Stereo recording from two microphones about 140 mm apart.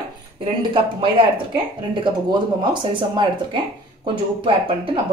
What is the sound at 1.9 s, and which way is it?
Speech, 35° right (ahead or behind).